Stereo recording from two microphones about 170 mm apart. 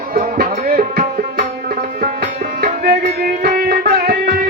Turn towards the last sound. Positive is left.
turn(degrees=-60)  # may be behind; listen again after turning